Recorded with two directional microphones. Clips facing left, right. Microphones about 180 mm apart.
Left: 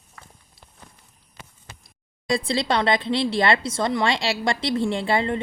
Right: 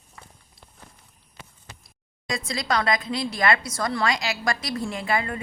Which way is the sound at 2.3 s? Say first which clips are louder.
Left 4 dB; 30° left (ahead or behind).